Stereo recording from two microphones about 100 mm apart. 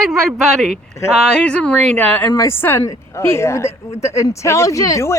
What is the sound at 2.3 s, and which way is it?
Speech, 25° left (ahead or behind).